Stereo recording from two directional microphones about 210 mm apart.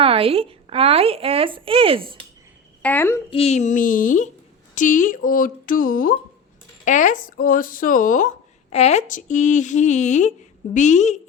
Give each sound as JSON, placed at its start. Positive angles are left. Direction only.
{"t": 0.0, "sound": "speech", "side_deg": -25}
{"t": 2.8, "sound": "a child's voice", "side_deg": 10}
{"t": 3.2, "sound": "speech", "side_deg": 30}